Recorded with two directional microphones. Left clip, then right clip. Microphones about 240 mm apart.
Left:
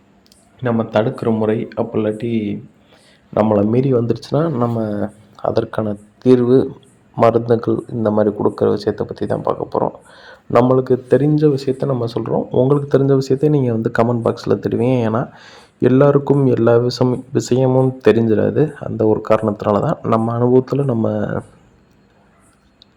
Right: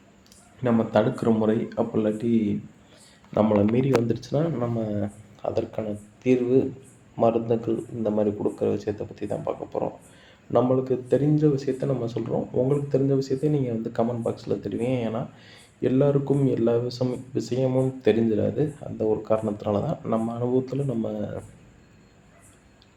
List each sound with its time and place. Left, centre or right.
0.6 s speech: left